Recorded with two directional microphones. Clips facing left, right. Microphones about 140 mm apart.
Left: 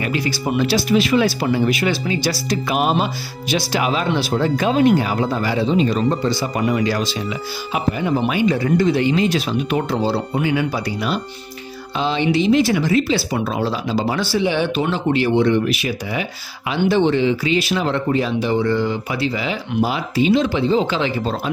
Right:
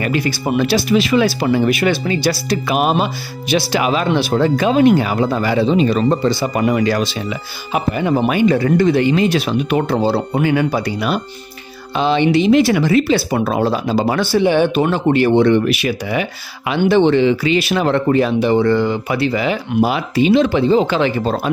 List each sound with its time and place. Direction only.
0.0 s speech: 55° right (ahead or behind)